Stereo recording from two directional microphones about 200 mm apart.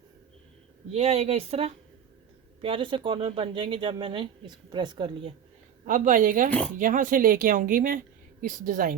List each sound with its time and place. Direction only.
0.9 s speech: 30° right (ahead or behind)
5.8 s speech: 40° right (ahead or behind)